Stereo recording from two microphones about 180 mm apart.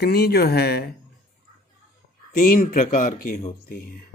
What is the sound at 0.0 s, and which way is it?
Speech, 60° left (ahead or behind).